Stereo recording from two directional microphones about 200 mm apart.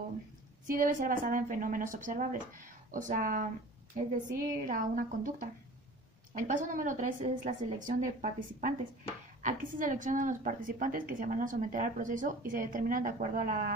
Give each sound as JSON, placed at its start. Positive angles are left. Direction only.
{"t": 0.7, "sound": "a woman's voice", "side_deg": -45}